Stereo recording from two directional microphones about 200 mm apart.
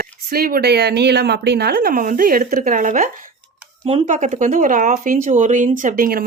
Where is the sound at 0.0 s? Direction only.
45° right (ahead or behind).